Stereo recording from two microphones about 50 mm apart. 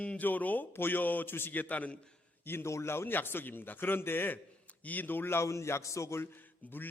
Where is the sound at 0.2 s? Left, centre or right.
Left.